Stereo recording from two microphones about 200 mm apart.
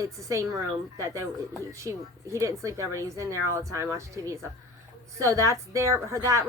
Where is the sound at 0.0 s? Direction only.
15° right (ahead or behind).